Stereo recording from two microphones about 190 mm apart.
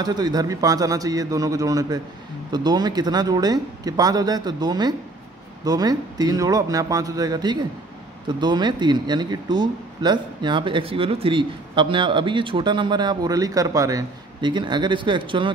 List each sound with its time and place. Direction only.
0.0 s speech: 20° right (ahead or behind)